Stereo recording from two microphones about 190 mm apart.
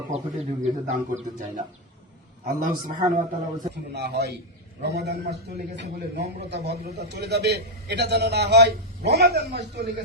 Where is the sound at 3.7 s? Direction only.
60° right (ahead or behind).